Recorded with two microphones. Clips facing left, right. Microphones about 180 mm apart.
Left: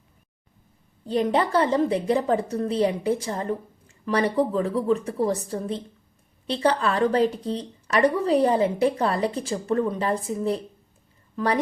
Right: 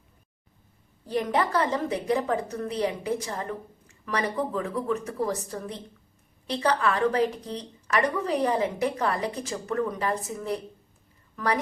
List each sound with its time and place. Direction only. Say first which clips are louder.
1.0 s a woman's voice: left 4 dB; 25° left (ahead or behind)